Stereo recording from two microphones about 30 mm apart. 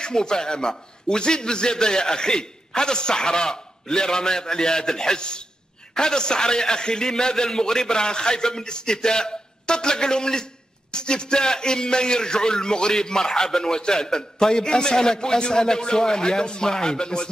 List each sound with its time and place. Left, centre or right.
0.0 s a man's voice: left